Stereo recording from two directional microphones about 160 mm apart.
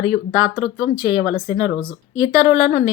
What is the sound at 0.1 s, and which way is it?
A woman's voice, 15° right (ahead or behind).